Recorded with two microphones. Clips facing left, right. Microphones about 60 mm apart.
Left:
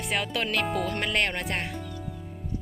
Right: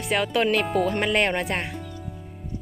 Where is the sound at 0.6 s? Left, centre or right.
Centre.